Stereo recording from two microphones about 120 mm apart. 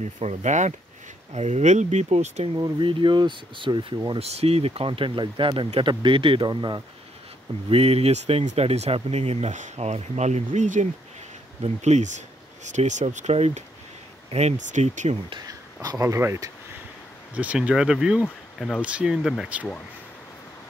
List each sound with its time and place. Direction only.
0.0 s speech: 70° right (ahead or behind)
1.3 s speech: 70° right (ahead or behind)
2.5 s speech: 40° right (ahead or behind)
4.2 s speech: 60° right (ahead or behind); by 6.8 s 35° right (ahead or behind)
7.7 s speech: 55° right (ahead or behind); by 10.9 s 85° right
11.6 s speech: 70° right (ahead or behind)
12.6 s speech: 85° right
15.2 s speech: 35° right (ahead or behind)
17.3 s speech: 10° right (ahead or behind)
18.2 s speech: 5° left (ahead or behind)
18.8 s speech: 10° right (ahead or behind)